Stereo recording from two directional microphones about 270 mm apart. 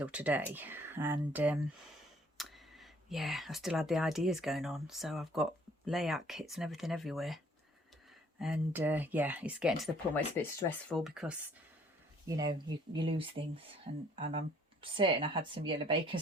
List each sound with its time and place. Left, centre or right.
0.0 s speech: centre
12.3 s speech: centre